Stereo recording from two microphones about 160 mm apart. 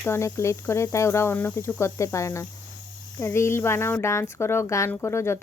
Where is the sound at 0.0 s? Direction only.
15° left (ahead or behind).